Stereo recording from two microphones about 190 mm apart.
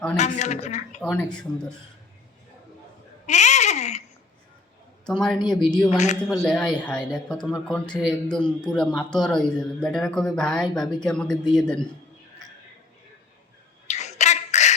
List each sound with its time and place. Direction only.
0.2 s speech: 40° left (ahead or behind)
1.1 s a man's voice: 5° left (ahead or behind)
3.2 s a sound: 40° left (ahead or behind)
5.0 s a man's voice: 5° left (ahead or behind)
5.4 s speech: 25° left (ahead or behind)
5.6 s a man's voice: centre (ahead or behind)
13.8 s a sound: 35° left (ahead or behind)